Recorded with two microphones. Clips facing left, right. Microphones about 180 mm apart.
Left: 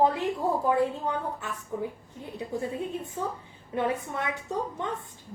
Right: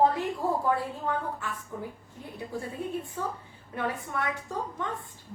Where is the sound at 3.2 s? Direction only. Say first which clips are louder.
Left 1 dB; 20° left (ahead or behind).